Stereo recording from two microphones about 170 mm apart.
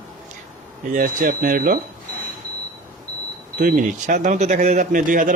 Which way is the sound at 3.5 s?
55° right (ahead or behind).